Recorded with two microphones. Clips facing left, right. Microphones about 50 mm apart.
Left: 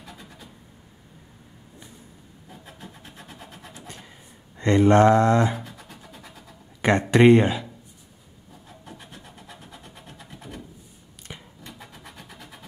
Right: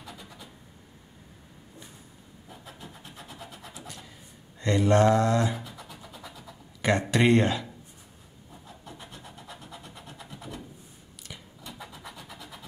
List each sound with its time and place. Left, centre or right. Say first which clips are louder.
3.0 s vehicle: left 1 dB; left
4.6 s speech: left 5 dB; left
6.1 s scratch: right 1 dB; left
7.3 s speech: left 4 dB; centre
9.8 s vehicle: even; left
11.2 s a sound: left 2 dB; left